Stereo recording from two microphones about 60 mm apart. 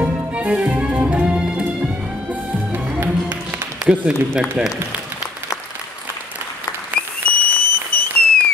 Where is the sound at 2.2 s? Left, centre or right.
Right.